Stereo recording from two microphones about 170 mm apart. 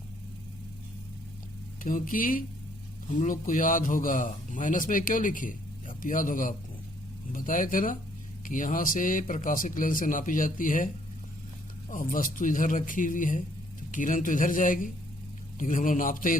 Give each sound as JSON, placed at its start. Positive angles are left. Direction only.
{"t": 1.8, "sound": "a man's voice", "side_deg": 50}
{"t": 11.9, "sound": "a man's voice", "side_deg": 50}